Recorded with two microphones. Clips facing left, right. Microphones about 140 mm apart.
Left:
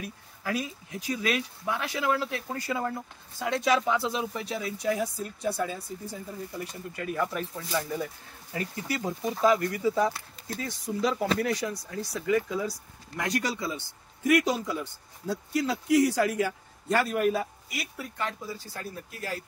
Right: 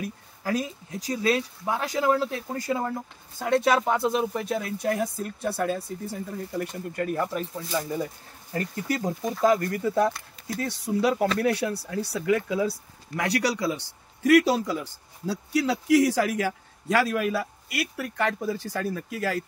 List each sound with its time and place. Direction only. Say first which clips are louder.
0.0 s speech: right 4 dB; 40° right (ahead or behind)
3.3 s speech: right 4 dB; 55° right (ahead or behind)
7.2 s speech: right 2 dB; 25° right (ahead or behind)
8.5 s a man's voice: right 4 dB; 45° right (ahead or behind); by 19.4 s 90° right